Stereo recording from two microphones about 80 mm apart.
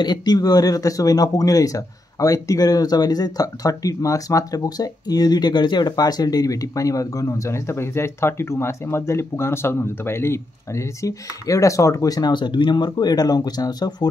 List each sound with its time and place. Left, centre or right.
0.0 s speech: left
11.0 s speech: left